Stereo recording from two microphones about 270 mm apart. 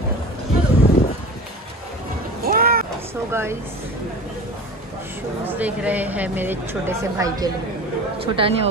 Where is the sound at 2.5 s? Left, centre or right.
Right.